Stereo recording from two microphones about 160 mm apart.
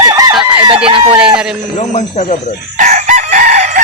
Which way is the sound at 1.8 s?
45° left (ahead or behind).